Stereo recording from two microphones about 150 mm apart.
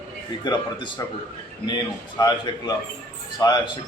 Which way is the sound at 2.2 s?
25° left (ahead or behind).